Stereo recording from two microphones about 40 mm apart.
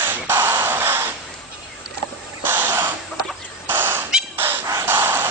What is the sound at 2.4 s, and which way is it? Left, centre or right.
Crow, right.